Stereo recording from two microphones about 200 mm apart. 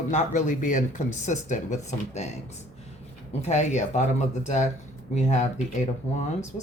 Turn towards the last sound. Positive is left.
turn(degrees=35)  # may be behind; listen again after turning